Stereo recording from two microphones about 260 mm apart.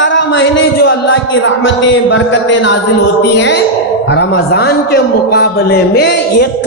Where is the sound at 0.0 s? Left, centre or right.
Left.